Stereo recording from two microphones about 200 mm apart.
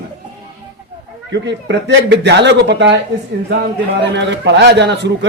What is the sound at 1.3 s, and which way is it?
Speech, 60° right (ahead or behind).